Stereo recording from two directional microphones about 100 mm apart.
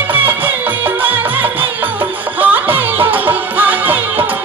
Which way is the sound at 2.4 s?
20° right (ahead or behind).